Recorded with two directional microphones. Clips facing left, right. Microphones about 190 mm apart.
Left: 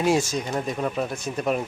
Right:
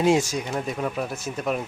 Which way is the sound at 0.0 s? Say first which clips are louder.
Right 1 dB; 15° right (ahead or behind).